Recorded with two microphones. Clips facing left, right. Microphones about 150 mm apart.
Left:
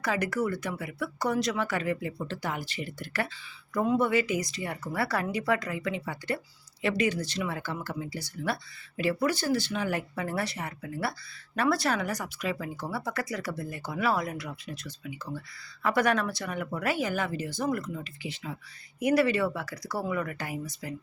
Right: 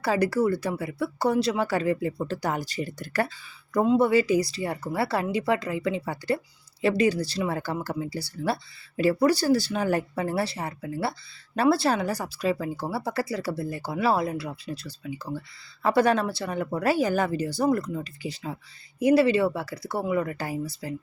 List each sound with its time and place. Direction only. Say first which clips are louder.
0.0 s speech: right 6 dB; 30° right (ahead or behind)
3.8 s speech: right 5 dB; 30° right (ahead or behind)